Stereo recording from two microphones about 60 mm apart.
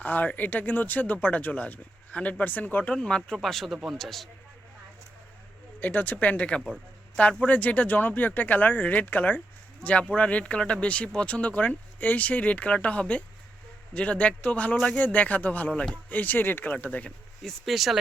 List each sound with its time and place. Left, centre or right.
0.0 s speech: left; by 4.3 s centre
5.8 s speech: left
15.7 s speech: centre
16.0 s speech: left
17.4 s speech: centre